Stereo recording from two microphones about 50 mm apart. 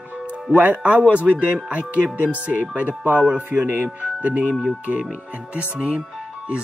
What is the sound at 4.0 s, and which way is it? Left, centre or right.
Speech, right.